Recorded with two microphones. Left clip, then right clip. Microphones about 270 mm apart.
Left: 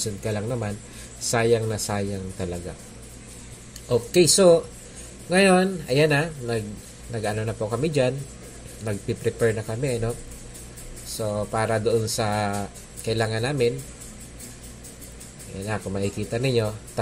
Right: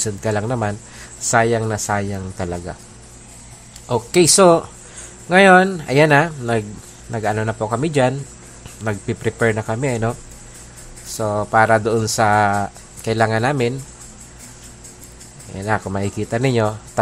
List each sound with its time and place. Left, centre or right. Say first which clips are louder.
0.0 s speech: right 7 dB; right
3.9 s speech: right 4 dB; right
11.5 s speech: right 9 dB; right
15.6 s speech: right 7 dB; right